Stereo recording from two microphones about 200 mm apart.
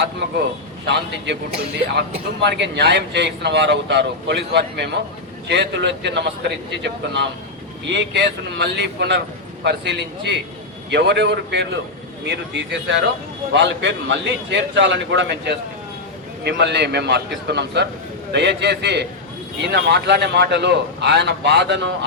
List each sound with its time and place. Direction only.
0.9 s a man's voice: 60° right (ahead or behind)